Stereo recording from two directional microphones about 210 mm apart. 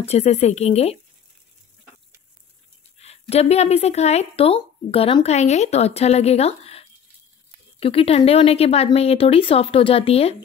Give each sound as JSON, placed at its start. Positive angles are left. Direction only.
{"t": 0.0, "sound": "speech", "side_deg": 30}
{"t": 3.0, "sound": "speech", "side_deg": 30}